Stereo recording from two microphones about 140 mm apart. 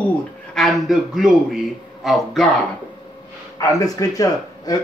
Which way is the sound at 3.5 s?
25° left (ahead or behind).